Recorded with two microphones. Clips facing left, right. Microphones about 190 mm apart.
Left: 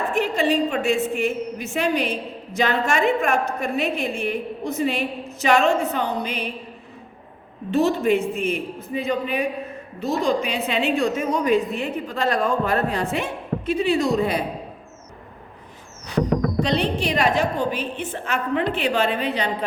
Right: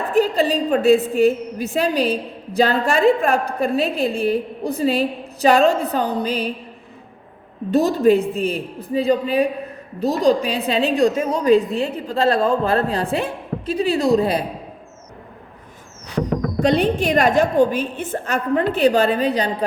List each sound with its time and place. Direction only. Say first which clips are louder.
0.1 s a woman's voice: right 5 dB; 35° right (ahead or behind)
7.7 s a woman's voice: right 4 dB; 40° right (ahead or behind)
16.6 s a woman's voice: right 5 dB; 50° right (ahead or behind)